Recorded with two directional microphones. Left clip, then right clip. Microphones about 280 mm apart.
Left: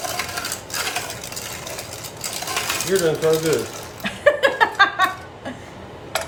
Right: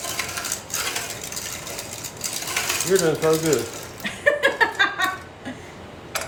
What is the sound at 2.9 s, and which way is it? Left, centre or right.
Speech, centre.